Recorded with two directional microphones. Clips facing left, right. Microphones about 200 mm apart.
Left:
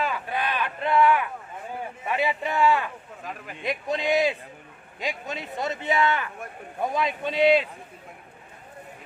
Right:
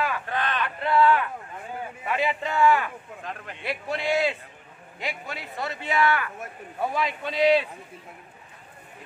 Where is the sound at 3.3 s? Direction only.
5° left (ahead or behind).